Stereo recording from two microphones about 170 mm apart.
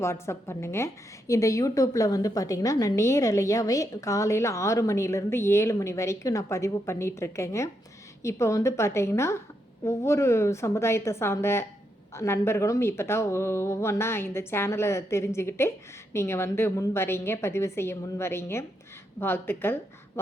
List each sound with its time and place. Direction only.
0.0 s a woman's voice: 15° left (ahead or behind)